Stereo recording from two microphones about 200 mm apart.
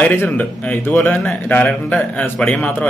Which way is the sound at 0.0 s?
10° left (ahead or behind).